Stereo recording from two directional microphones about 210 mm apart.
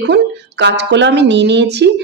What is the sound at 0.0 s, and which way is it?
Speech, 55° right (ahead or behind).